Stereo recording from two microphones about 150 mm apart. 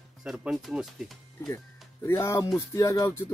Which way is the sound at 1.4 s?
15° left (ahead or behind).